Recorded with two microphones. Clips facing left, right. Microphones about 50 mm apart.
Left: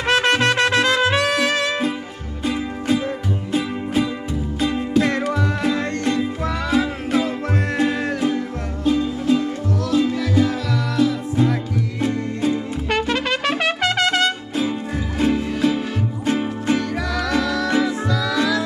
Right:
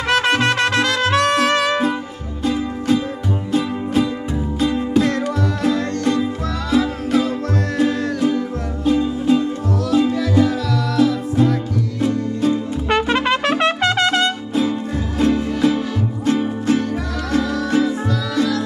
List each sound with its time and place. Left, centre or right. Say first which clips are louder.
0.0 s music: right 1 dB; centre
0.6 s trumpet: left 1 dB; centre
2.4 s music: right 3 dB; centre
5.3 s music: right 2 dB; left
8.8 s music: right 2 dB; centre
12.8 s trumpet: right 4 dB; centre
13.4 s trumpet: right 3 dB; centre
13.8 s music: left 1 dB; centre
16.3 s music: right 3 dB; left
17.4 s music: right 3 dB; left